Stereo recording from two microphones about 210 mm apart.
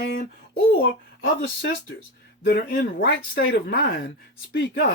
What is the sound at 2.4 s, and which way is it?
Speech, 50° left (ahead or behind).